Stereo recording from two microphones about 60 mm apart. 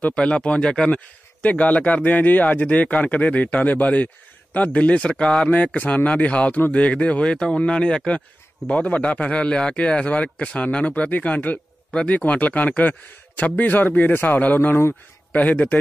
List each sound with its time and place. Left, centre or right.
0.0 s speech: centre